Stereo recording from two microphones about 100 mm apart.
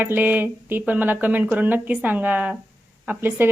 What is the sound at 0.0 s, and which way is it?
A woman's voice, 20° right (ahead or behind).